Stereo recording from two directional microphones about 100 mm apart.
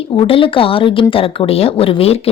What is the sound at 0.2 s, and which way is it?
A woman's voice, 60° left (ahead or behind).